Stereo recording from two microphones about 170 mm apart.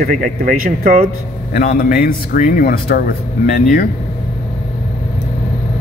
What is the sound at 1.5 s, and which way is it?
Speech, 55° left (ahead or behind).